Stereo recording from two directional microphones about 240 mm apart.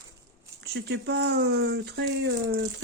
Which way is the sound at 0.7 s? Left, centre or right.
Right.